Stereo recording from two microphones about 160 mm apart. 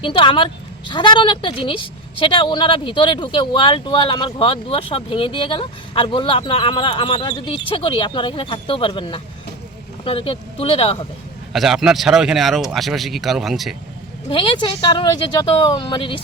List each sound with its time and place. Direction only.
0.0 s a woman's voice: 30° left (ahead or behind)
11.5 s speech: centre (ahead or behind)
14.3 s a woman's voice: 30° left (ahead or behind)